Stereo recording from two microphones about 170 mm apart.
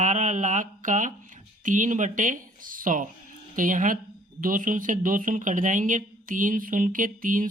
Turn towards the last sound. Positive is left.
turn(degrees=-50)  # may be behind; listen again after turning